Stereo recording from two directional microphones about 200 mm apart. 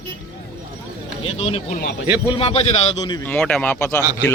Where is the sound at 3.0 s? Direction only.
20° left (ahead or behind).